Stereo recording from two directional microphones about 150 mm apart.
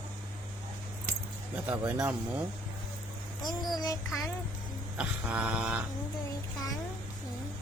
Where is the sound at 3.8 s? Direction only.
25° left (ahead or behind).